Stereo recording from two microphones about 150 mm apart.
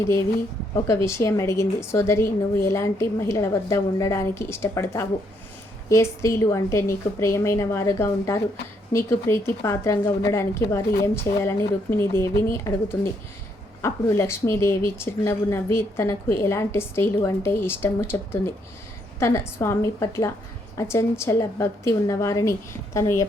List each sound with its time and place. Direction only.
0.0 s a woman's voice: 20° left (ahead or behind)